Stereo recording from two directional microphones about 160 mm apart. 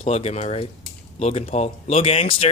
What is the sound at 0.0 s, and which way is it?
Speech, 40° left (ahead or behind).